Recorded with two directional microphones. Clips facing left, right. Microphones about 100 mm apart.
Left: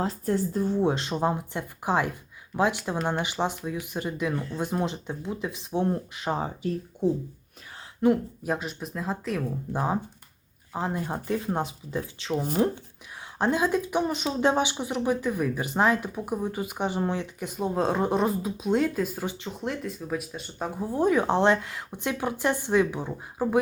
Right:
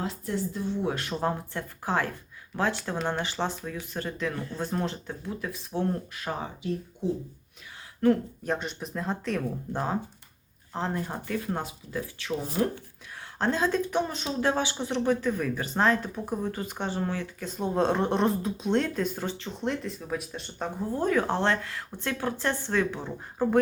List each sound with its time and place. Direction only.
0.0 s speech: 40° left (ahead or behind)
0.9 s speech: 20° left (ahead or behind)
8.0 s speech: 15° left (ahead or behind)
8.5 s speech: centre (ahead or behind); by 17.6 s 15° left (ahead or behind)
17.6 s speech: 5° left (ahead or behind)